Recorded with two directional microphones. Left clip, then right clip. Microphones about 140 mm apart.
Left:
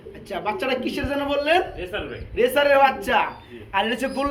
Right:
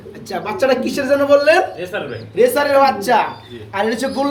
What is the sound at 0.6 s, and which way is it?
Speech, 20° left (ahead or behind).